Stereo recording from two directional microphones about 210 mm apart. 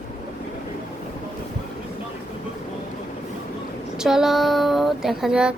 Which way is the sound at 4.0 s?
5° right (ahead or behind).